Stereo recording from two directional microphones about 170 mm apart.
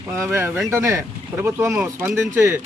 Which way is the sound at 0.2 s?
15° right (ahead or behind).